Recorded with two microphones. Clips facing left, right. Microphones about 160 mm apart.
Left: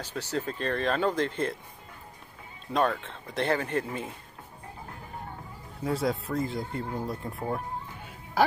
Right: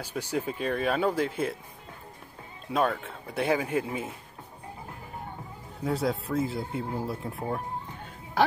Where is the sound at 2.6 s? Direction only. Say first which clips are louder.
Even; 5° right (ahead or behind).